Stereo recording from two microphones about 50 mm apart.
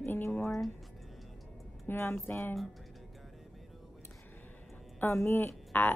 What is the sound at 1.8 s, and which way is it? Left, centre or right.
Speech, left.